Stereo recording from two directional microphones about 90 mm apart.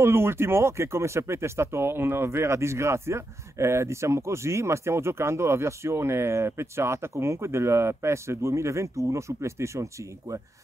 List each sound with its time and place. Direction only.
0.0 s speech: 25° right (ahead or behind)